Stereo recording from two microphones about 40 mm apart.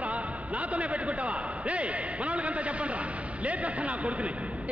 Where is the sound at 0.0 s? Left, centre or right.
Right.